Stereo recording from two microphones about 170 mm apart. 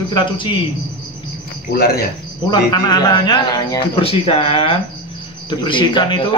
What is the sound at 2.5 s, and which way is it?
A man's voice, 25° left (ahead or behind).